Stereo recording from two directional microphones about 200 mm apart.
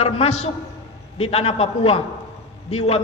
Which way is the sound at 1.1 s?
30° left (ahead or behind).